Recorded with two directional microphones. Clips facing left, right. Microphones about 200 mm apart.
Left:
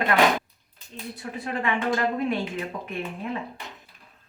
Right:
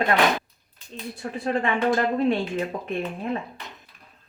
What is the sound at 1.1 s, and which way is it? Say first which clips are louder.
Speech: right 5 dB; 40° right (ahead or behind).